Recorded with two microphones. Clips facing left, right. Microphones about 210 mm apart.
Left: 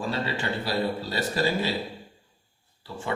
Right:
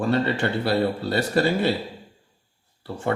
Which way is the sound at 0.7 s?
65° right (ahead or behind).